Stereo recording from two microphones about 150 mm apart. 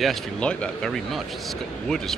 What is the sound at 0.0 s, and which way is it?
Speech, 5° left (ahead or behind).